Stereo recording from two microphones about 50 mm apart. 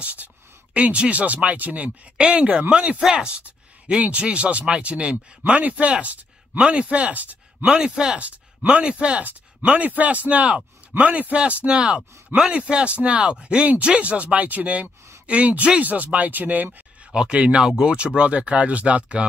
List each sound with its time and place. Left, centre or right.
0.0 s a man's voice: right
7.6 s speech: centre
8.2 s speech: right
17.1 s speech: right